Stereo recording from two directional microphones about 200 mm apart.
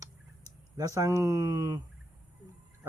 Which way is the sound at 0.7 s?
15° right (ahead or behind).